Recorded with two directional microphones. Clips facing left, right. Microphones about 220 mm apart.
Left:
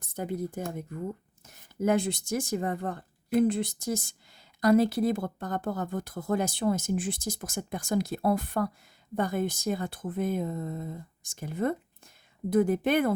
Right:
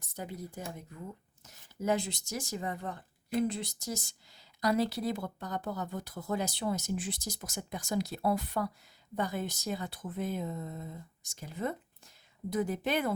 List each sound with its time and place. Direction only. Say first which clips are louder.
0.0 s speech: left 9 dB; 55° left (ahead or behind)